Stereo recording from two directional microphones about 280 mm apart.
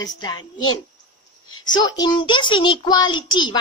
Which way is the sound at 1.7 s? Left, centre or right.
Centre.